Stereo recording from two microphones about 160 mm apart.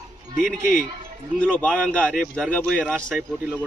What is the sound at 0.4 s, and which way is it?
Speech, 55° left (ahead or behind).